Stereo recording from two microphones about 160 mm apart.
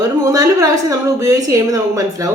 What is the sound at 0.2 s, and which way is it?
A woman's voice, 20° right (ahead or behind).